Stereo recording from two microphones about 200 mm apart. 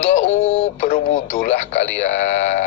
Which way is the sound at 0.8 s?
40° left (ahead or behind).